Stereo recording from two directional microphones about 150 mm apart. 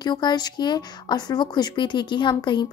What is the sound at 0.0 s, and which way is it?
Speech, 30° left (ahead or behind).